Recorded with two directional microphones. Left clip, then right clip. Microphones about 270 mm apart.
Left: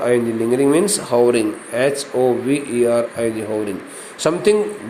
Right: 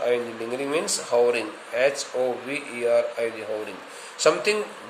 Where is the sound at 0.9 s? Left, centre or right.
Centre.